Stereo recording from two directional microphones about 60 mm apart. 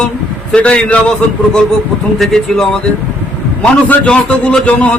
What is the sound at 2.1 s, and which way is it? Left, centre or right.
Speech, centre.